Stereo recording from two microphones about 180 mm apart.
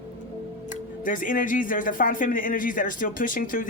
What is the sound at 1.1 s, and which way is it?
Speech, 50° left (ahead or behind).